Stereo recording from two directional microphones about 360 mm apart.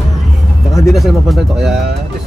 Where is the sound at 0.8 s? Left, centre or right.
Centre.